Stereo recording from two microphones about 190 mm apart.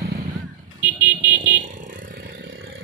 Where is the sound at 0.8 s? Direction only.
5° right (ahead or behind).